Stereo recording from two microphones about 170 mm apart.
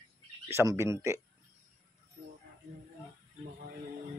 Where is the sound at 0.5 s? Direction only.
15° right (ahead or behind).